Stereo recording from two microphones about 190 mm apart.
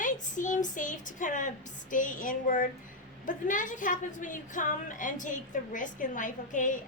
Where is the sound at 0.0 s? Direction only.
40° left (ahead or behind).